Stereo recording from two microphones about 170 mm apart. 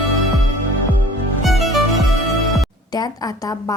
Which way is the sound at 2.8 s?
25° left (ahead or behind).